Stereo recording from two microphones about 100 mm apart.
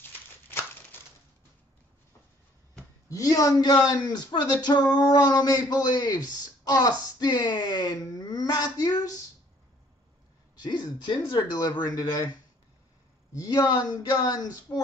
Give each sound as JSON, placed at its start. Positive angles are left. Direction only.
{"t": 0.0, "sound": "crumpling", "side_deg": 25}
{"t": 3.1, "sound": "a man's voice", "side_deg": 35}
{"t": 10.6, "sound": "speech", "side_deg": 45}
{"t": 13.4, "sound": "a man's voice", "side_deg": 40}